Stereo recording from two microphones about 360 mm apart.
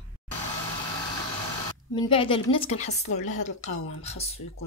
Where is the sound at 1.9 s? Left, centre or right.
Centre.